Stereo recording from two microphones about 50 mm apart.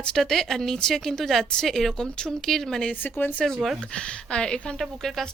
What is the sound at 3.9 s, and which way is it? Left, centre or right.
Speech, centre.